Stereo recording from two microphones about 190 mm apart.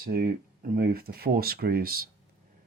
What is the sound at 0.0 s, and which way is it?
Speech, 55° right (ahead or behind).